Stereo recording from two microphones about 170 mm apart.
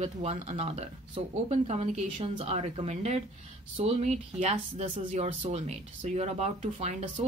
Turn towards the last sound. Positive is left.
turn(degrees=-35)  # may be behind; listen again after turning